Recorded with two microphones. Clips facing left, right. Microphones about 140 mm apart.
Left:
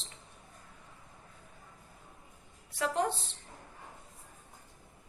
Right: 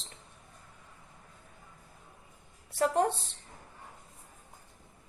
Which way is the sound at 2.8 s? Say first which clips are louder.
Right 4 dB; 45° right (ahead or behind).